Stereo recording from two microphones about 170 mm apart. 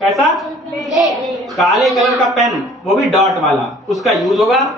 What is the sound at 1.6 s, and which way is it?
A man's voice, centre (ahead or behind).